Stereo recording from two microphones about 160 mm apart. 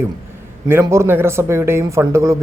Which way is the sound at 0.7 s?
15° right (ahead or behind).